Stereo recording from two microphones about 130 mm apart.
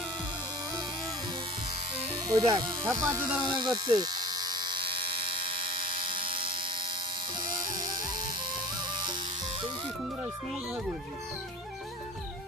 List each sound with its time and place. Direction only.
2.3 s speech: 25° right (ahead or behind)
3.4 s electric shaver: 35° right (ahead or behind)
5.5 s electric toothbrush: 90° right
6.1 s electric shaver: 45° right (ahead or behind)
7.3 s music: 35° right (ahead or behind)